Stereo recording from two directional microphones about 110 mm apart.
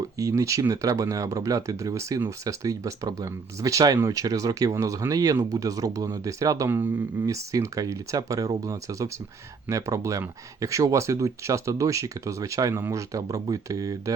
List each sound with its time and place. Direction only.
0.2 s speech: 30° right (ahead or behind)